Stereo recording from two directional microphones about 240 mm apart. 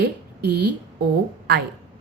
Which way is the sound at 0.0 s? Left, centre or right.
Right.